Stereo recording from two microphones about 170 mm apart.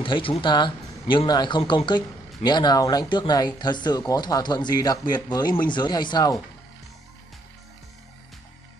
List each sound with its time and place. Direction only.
0.0 s speech: 30° left (ahead or behind)